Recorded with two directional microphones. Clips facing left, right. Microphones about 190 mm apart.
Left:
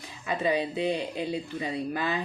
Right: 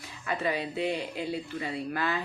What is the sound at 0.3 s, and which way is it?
Speech, 20° left (ahead or behind).